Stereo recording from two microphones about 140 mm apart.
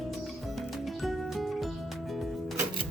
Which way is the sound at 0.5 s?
Centre (ahead or behind).